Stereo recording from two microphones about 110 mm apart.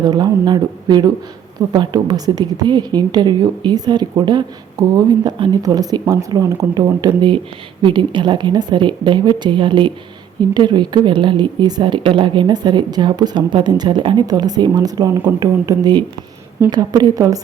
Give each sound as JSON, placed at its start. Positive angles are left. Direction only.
{"t": 0.0, "sound": "a woman's voice", "side_deg": -40}